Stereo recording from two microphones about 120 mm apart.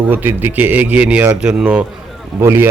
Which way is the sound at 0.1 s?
15° right (ahead or behind).